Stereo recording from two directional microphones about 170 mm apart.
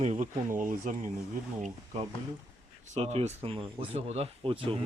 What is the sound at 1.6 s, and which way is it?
Speech, 40° right (ahead or behind).